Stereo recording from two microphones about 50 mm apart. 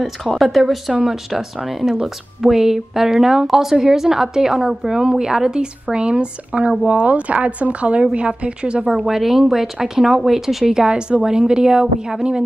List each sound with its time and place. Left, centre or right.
0.0 s a woman's voice: centre; by 8.8 s right
8.8 s a woman's voice: centre